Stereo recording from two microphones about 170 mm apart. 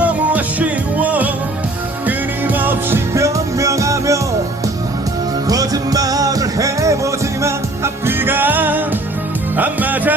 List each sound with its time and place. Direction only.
0.0 s music: 10° right (ahead or behind)
5.5 s music: 20° right (ahead or behind)